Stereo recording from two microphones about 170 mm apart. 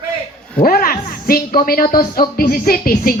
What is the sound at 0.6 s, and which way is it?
A woman's voice, 60° left (ahead or behind).